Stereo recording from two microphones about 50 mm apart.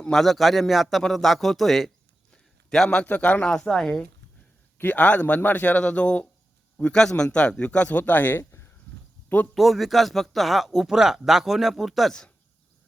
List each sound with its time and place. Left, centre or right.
0.1 s speech: centre
2.3 s a sound: centre
3.1 s speech: left; by 4.0 s centre
4.9 s speech: left
5.8 s a man's voice: left
8.4 s a sound: left
9.6 s speech: centre